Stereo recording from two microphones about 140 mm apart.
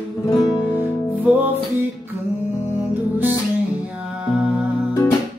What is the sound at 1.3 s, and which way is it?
Music, 5° right (ahead or behind).